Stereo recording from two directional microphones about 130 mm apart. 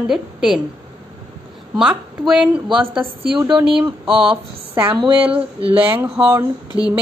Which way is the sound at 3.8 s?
40° right (ahead or behind).